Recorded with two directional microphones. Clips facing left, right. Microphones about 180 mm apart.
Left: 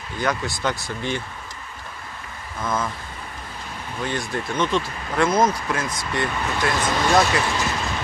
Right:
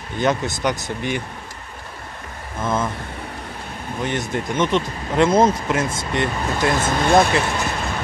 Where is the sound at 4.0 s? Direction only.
20° right (ahead or behind).